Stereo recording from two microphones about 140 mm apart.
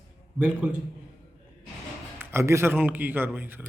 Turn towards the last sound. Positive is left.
turn(degrees=-15)  # may be behind; listen again after turning